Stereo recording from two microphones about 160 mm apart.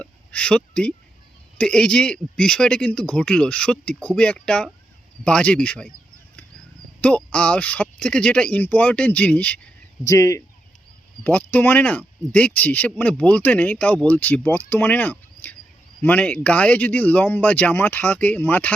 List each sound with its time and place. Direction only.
0.0 s a sound: 10° left (ahead or behind)
1.5 s speech: 5° left (ahead or behind)
7.0 s speech: 5° left (ahead or behind)
10.1 s speech: 20° left (ahead or behind)